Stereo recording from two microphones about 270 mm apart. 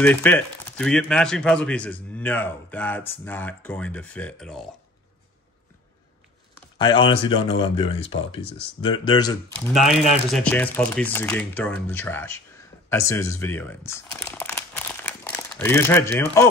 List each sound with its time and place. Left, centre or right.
0.0 s speech: centre
6.8 s speech: centre
9.7 s speech: centre
15.0 s a sound: centre